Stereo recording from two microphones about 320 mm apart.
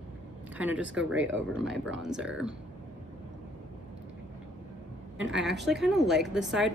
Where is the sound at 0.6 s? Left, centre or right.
Centre.